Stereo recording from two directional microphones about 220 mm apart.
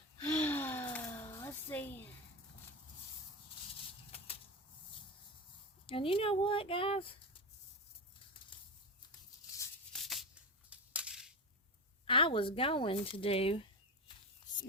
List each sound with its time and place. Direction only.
0.2 s gasp: 10° left (ahead or behind)
5.8 s speech: 25° left (ahead or behind)
9.9 s a sound: centre (ahead or behind)
10.7 s crushing: 5° right (ahead or behind)
12.0 s speech: 25° left (ahead or behind)